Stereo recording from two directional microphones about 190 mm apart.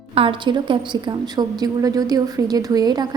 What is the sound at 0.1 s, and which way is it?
A woman's voice, 30° right (ahead or behind).